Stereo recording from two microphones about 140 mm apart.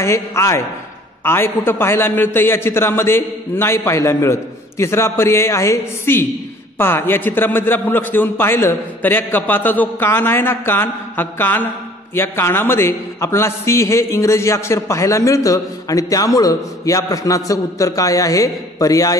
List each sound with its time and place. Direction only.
0.0 s a man's voice: 20° left (ahead or behind)